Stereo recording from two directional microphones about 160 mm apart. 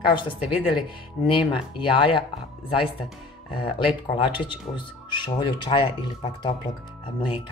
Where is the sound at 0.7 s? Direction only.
30° left (ahead or behind).